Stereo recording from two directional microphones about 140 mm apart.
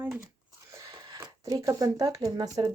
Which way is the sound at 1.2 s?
25° right (ahead or behind).